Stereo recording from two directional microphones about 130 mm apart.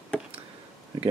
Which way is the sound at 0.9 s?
35° right (ahead or behind).